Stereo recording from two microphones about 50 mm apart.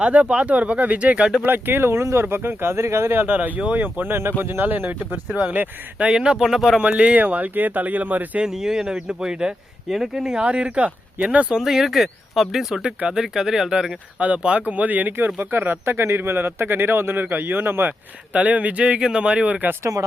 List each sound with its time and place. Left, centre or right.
0.0 s speech: right
1.5 s speech: right
2.3 s speech: right
3.7 s speech: right
4.1 s speech: right
6.0 s speech: centre
6.7 s speech: right
8.6 s speech: centre
10.4 s speech: right
11.6 s speech: centre
12.8 s speech: centre
14.2 s speech: right
18.3 s speech: right